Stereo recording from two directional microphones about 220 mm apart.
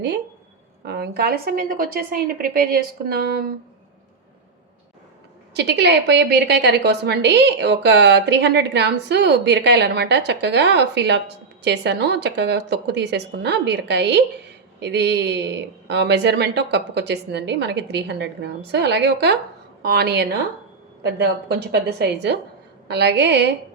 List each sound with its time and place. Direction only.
0.9 s a woman's voice: 45° right (ahead or behind)
5.5 s a woman's voice: 50° right (ahead or behind)
21.5 s a woman's voice: 50° right (ahead or behind)